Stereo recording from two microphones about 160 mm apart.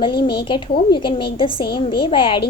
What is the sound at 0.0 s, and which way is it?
A woman's voice, 30° left (ahead or behind).